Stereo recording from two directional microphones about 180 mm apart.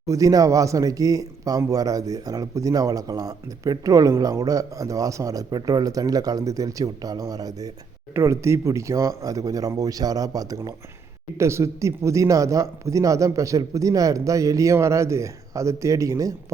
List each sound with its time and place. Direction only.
0.1 s speech: 20° right (ahead or behind)